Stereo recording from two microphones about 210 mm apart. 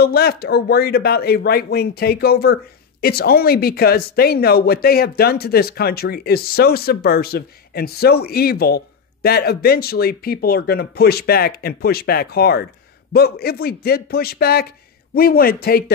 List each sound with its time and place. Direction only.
0.0 s speech: 45° left (ahead or behind)